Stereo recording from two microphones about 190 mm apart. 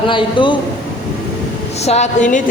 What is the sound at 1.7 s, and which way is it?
Speech, 35° left (ahead or behind).